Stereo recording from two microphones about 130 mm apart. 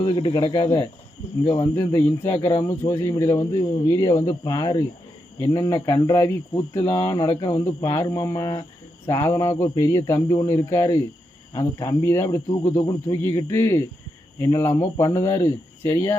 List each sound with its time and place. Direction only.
0.0 s speech: 35° left (ahead or behind)
1.7 s speech: 20° left (ahead or behind)